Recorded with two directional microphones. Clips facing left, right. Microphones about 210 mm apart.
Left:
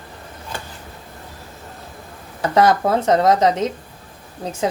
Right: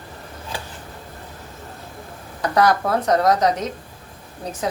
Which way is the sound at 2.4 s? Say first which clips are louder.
Left 2 dB; 25° left (ahead or behind).